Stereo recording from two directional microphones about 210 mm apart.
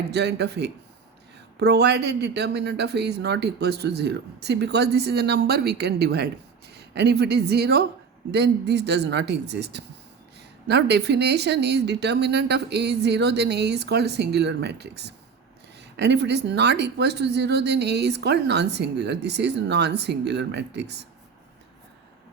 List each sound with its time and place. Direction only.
0.1 s speech: 55° right (ahead or behind)